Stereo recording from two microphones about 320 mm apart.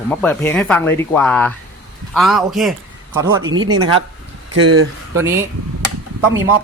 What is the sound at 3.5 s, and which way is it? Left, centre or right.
Speech, right.